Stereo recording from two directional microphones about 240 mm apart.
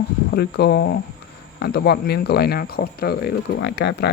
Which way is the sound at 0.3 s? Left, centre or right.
Left.